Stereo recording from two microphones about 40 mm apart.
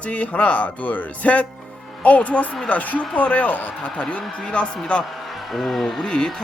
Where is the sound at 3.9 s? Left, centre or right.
Left.